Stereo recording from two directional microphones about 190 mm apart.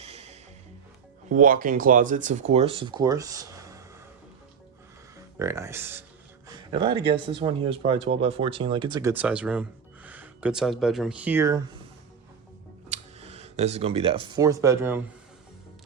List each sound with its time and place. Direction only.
0.0 s music: 35° right (ahead or behind)
1.3 s speech: 45° right (ahead or behind); by 3.8 s 15° right (ahead or behind)
5.4 s speech: 15° right (ahead or behind)
6.5 s speech: 25° right (ahead or behind)
12.9 s speech: 35° right (ahead or behind); by 15.0 s 10° right (ahead or behind)